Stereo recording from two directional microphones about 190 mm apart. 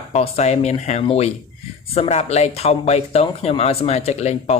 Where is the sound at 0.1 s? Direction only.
35° left (ahead or behind).